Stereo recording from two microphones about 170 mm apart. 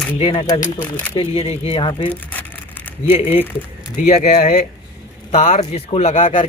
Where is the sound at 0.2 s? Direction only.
30° left (ahead or behind).